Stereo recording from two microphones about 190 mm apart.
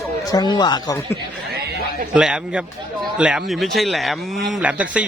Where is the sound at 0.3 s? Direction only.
20° left (ahead or behind).